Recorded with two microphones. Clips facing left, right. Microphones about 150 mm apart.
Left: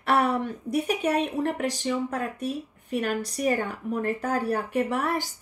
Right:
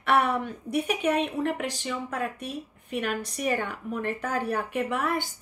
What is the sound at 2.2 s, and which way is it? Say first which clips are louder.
Speech: left 2 dB; centre (ahead or behind).